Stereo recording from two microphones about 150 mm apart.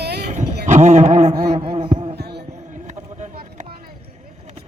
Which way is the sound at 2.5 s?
55° right (ahead or behind).